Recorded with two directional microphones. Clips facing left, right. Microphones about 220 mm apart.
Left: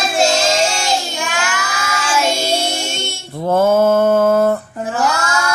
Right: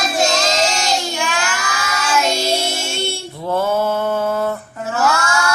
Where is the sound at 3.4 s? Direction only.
45° left (ahead or behind).